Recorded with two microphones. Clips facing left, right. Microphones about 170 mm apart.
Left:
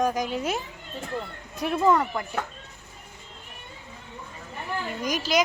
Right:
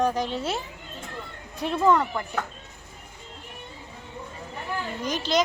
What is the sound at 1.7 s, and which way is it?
Speech, 10° left (ahead or behind).